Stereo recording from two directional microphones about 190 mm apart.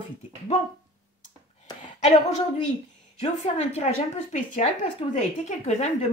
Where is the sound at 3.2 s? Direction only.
35° left (ahead or behind).